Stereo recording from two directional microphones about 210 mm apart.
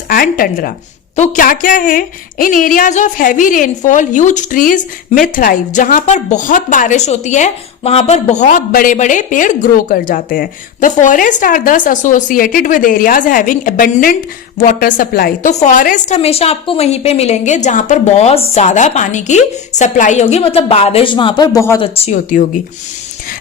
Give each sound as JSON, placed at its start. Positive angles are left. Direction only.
{"t": 0.1, "sound": "a woman's voice", "side_deg": 45}
{"t": 21.9, "sound": "a woman's voice", "side_deg": 30}